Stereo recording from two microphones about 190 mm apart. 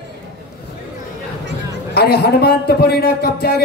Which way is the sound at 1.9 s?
60° left (ahead or behind).